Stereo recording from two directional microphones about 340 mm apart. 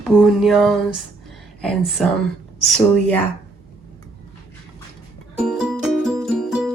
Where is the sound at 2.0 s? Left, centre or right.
Centre.